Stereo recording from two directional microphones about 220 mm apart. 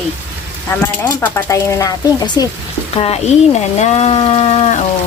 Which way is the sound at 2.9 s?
25° left (ahead or behind).